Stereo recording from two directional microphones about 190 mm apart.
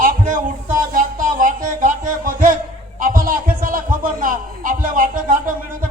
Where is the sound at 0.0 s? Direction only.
45° right (ahead or behind).